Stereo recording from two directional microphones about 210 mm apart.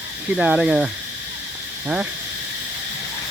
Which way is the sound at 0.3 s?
5° right (ahead or behind).